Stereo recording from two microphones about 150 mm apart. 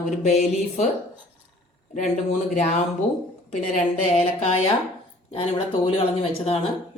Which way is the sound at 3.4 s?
50° left (ahead or behind).